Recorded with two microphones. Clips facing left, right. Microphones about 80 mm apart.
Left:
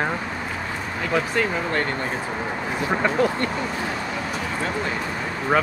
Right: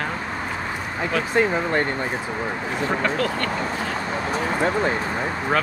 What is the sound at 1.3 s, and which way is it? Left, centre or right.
Speech, right.